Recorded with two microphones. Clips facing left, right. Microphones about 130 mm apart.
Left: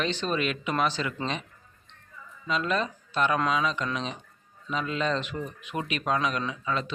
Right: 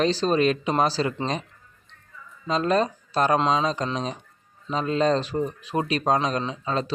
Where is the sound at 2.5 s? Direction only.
40° right (ahead or behind).